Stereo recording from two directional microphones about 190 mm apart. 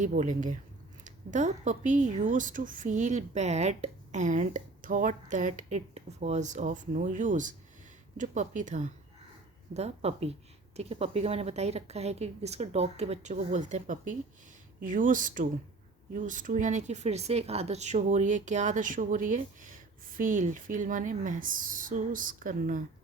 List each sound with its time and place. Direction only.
0.0 s speech: 40° right (ahead or behind)